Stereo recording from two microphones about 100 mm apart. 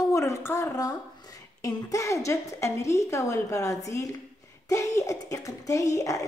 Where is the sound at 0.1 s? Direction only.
30° left (ahead or behind).